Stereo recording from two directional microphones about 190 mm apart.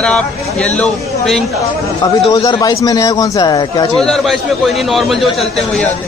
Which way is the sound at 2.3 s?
20° left (ahead or behind).